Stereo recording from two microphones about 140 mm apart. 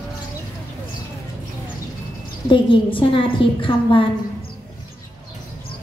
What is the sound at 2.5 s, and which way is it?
A woman's voice, 35° left (ahead or behind).